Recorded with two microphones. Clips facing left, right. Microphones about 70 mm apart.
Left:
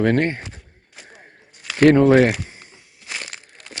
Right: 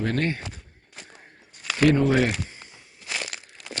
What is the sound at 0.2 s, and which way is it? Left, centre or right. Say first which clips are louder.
Speech: left 5 dB; left.